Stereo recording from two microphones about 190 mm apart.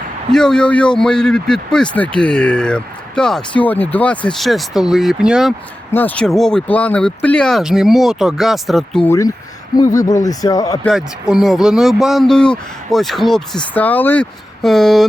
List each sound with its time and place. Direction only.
0.3 s a man's voice: 5° left (ahead or behind)
5.9 s a man's voice: 10° left (ahead or behind)
9.7 s speech: 20° left (ahead or behind)
10.8 s a man's voice: centre (ahead or behind)